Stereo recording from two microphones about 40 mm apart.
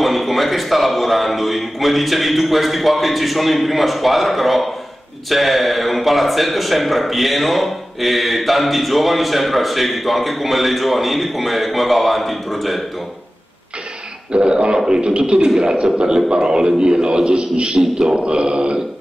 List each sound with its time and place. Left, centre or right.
0.0 s a man's voice: centre
14.3 s a man's voice: right